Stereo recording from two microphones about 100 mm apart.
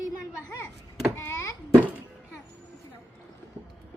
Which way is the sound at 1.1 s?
30° left (ahead or behind).